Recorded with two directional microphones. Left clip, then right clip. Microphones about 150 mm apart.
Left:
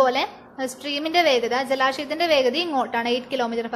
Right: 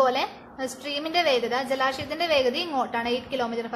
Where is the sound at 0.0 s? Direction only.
25° left (ahead or behind).